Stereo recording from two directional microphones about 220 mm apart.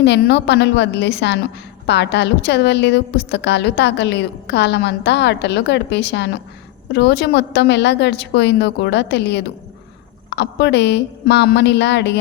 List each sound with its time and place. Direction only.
0.0 s a woman's voice: 50° left (ahead or behind)